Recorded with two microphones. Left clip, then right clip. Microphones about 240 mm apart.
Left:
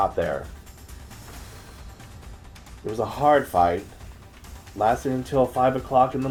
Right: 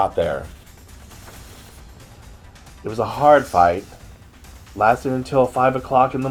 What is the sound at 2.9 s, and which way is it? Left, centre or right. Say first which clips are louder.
Speech: right 6 dB; right.